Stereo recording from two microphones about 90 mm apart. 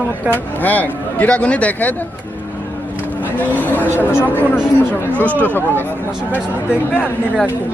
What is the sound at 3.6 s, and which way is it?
Speech, 20° left (ahead or behind).